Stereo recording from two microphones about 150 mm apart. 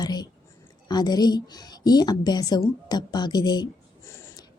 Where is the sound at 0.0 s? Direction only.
30° left (ahead or behind).